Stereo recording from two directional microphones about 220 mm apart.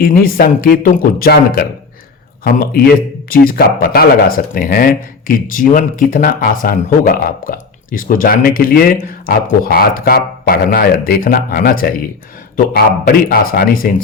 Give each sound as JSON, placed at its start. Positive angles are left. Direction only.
{"t": 0.0, "sound": "speech", "side_deg": 40}